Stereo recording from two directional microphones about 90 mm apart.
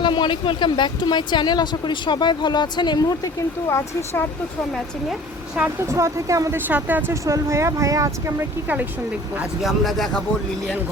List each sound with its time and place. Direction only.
0.0 s speech: 60° left (ahead or behind)
3.7 s speech: 30° left (ahead or behind)
5.6 s a woman's voice: 10° right (ahead or behind)
5.9 s speech: 35° right (ahead or behind)
6.7 s speech: 20° right (ahead or behind)
7.1 s speech: 35° right (ahead or behind)
8.6 s speech: 20° right (ahead or behind)
9.6 s speech: centre (ahead or behind)